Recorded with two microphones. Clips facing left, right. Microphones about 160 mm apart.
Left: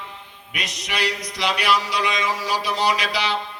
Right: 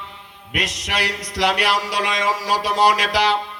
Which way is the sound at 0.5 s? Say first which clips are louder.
Right 4 dB; 80° right.